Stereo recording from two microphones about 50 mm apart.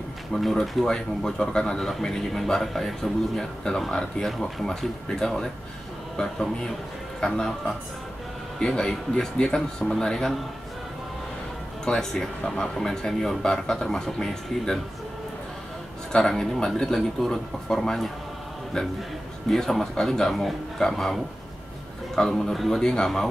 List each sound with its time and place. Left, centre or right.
0.3 s a man's voice: centre
11.8 s a man's voice: centre
16.1 s a man's voice: centre
22.3 s a man's voice: centre